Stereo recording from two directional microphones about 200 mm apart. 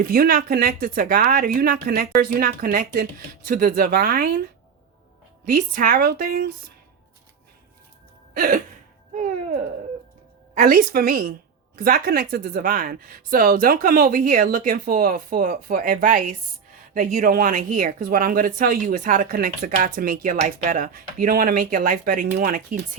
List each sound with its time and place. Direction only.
0.0 s speech: 45° right (ahead or behind)
5.5 s speech: 45° right (ahead or behind)
8.3 s music: 45° right (ahead or behind)
10.5 s speech: 40° right (ahead or behind)